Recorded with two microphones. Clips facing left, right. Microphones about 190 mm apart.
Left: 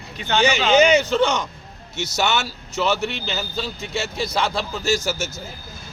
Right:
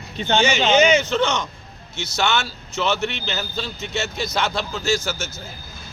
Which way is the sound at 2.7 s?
35° left (ahead or behind).